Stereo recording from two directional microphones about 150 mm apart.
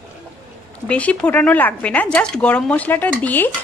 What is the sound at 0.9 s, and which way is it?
Speech, 10° left (ahead or behind).